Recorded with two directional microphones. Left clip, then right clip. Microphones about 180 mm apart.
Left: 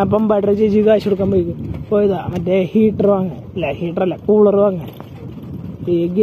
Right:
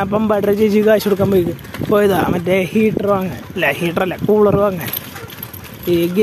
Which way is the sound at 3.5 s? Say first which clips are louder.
Right 5 dB; 90° right.